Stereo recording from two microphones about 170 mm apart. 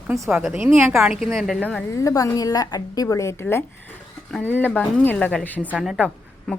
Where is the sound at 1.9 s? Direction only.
20° left (ahead or behind).